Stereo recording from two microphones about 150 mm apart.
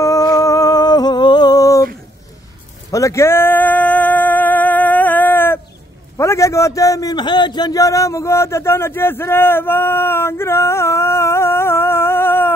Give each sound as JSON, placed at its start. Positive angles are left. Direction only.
{"t": 0.0, "sound": "humming", "side_deg": 25}
{"t": 2.9, "sound": "a sound", "side_deg": 20}
{"t": 6.1, "sound": "a man's voice", "side_deg": 20}